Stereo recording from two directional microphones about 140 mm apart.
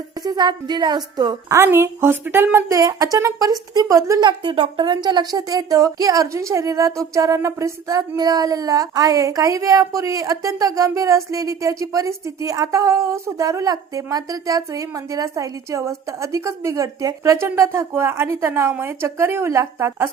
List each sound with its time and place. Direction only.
0.2 s speech: 30° right (ahead or behind)
1.5 s speech: 20° right (ahead or behind)
4.3 s speech: 35° right (ahead or behind); by 20.1 s 20° right (ahead or behind)